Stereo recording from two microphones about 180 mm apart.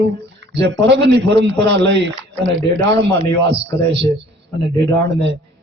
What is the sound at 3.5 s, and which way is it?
Speech, 75° right (ahead or behind).